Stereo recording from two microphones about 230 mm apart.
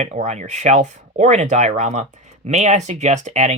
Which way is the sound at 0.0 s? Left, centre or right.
Right.